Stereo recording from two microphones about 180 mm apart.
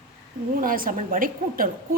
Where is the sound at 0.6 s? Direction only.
50° right (ahead or behind).